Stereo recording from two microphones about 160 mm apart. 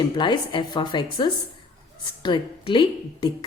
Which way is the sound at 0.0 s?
30° left (ahead or behind).